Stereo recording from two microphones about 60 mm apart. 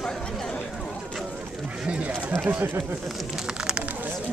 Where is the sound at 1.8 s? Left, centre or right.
Centre.